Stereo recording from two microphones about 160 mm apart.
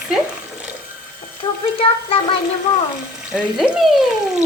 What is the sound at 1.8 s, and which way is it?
Music, 35° left (ahead or behind).